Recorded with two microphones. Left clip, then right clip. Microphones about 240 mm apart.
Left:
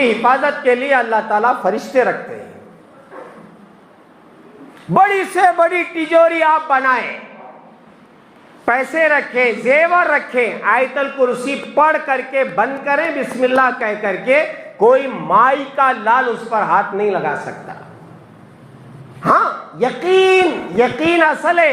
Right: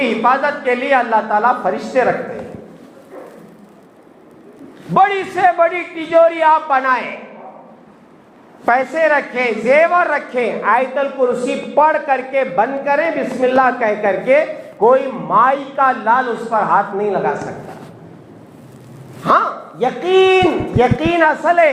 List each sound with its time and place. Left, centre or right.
0.0 s a woman's voice: left
4.9 s a man's voice: left
8.6 s a man's voice: left
19.2 s a man's voice: left